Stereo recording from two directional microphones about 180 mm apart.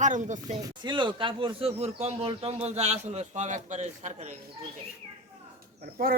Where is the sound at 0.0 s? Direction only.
45° right (ahead or behind).